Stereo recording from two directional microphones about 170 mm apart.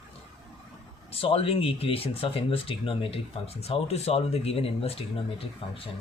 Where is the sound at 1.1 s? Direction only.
35° left (ahead or behind).